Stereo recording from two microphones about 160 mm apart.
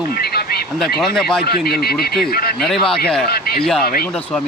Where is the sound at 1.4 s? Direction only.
75° left (ahead or behind).